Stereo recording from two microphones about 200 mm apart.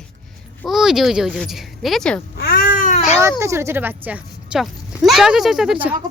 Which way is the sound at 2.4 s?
50° left (ahead or behind).